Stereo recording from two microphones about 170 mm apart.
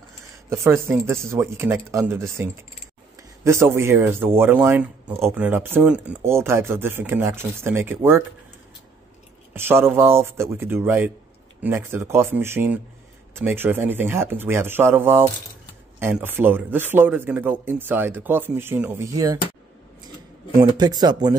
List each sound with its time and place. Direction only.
0.5 s speech: 15° right (ahead or behind)
9.5 s speech: 15° right (ahead or behind)
20.7 s speech: 25° right (ahead or behind)